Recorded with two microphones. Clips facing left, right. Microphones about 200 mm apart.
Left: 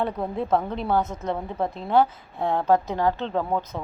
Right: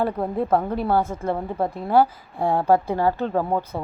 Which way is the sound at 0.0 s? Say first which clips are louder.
Right 3 dB; 10° right (ahead or behind).